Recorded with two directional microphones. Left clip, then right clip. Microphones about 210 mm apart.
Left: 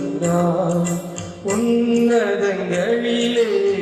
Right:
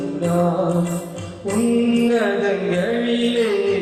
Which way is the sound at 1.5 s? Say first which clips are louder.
Left 1 dB; 35° left (ahead or behind).